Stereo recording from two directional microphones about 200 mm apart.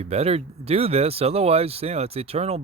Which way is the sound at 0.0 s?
30° right (ahead or behind).